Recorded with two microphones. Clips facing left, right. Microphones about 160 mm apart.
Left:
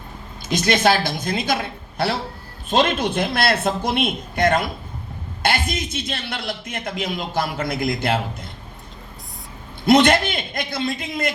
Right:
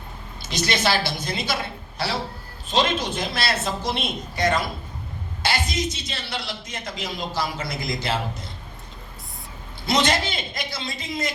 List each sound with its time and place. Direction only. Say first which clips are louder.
0.5 s a woman's voice: left 5 dB; 50° left (ahead or behind)
9.8 s a man's voice: left 7 dB; 55° left (ahead or behind)